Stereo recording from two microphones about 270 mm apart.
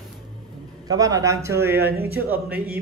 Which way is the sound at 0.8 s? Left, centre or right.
Centre.